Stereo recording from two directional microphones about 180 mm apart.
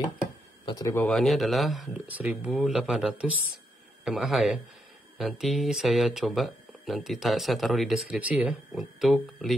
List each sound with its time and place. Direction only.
0.7 s speech: 20° left (ahead or behind)
1.0 s speech: centre (ahead or behind)